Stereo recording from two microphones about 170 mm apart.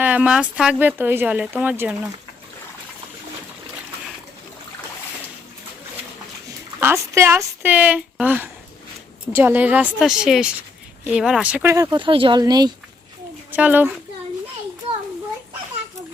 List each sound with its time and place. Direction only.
0.0 s speech: 5° right (ahead or behind)
6.7 s speech: 15° right (ahead or behind)
13.5 s speech: 10° right (ahead or behind)